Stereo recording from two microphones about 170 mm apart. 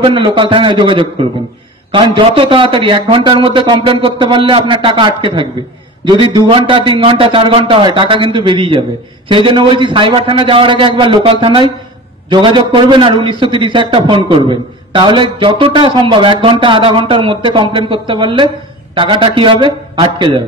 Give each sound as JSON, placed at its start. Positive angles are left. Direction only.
{"t": 0.0, "sound": "a man's voice", "side_deg": -30}